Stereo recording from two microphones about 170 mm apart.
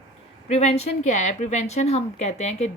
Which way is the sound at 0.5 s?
40° left (ahead or behind).